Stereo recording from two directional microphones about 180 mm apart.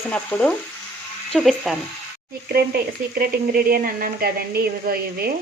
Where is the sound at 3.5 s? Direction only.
55° right (ahead or behind).